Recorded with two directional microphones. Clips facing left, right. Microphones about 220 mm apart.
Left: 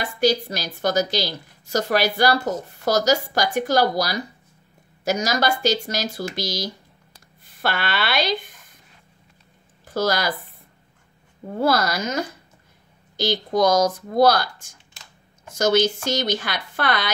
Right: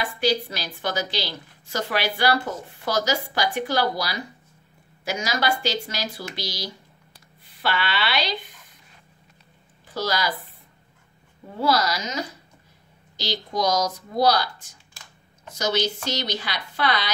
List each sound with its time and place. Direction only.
0.0 s a woman's voice: 40° left (ahead or behind)
9.8 s speech: 50° left (ahead or behind)
11.4 s a woman's voice: 50° left (ahead or behind)